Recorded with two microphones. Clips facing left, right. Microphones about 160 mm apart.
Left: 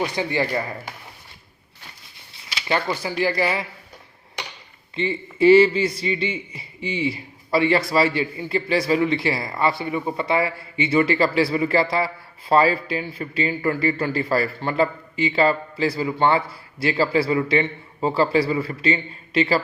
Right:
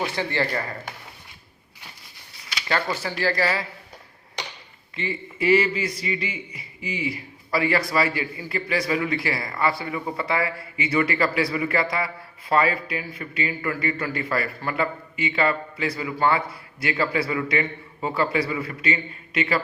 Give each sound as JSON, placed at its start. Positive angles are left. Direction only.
{"t": 0.0, "sound": "speech", "side_deg": 15}
{"t": 2.3, "sound": "speech", "side_deg": 20}
{"t": 4.9, "sound": "a man's voice", "side_deg": 30}